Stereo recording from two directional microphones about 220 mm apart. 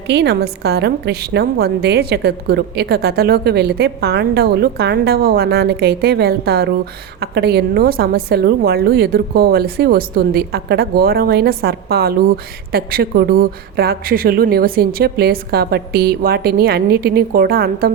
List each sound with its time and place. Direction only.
0.1 s a woman's voice: 50° right (ahead or behind)